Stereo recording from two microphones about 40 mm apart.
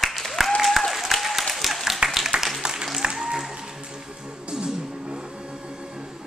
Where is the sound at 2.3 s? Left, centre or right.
Right.